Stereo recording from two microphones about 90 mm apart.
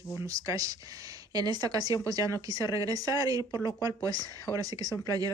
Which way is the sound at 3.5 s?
45° left (ahead or behind).